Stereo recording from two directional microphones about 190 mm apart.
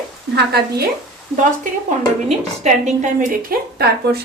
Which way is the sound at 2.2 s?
40° right (ahead or behind).